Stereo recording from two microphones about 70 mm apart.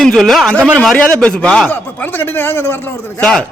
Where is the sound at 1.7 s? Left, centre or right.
Left.